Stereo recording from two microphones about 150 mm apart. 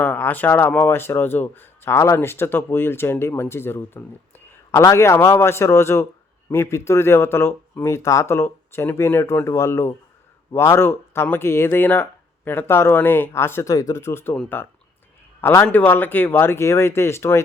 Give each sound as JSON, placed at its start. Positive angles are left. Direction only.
{"t": 0.0, "sound": "speech", "side_deg": 10}